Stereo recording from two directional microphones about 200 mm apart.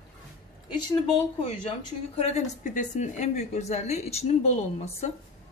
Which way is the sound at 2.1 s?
35° left (ahead or behind).